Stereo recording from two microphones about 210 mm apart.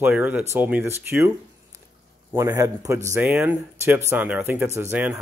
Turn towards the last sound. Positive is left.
turn(degrees=-10)  # may be behind; listen again after turning